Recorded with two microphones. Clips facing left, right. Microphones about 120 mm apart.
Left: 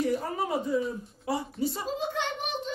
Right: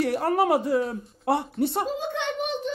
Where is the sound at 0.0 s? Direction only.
70° right (ahead or behind).